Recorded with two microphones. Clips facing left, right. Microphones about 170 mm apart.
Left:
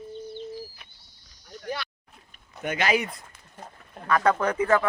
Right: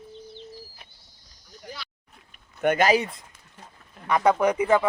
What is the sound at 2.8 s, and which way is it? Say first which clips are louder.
Speech: right 3 dB; 30° right (ahead or behind).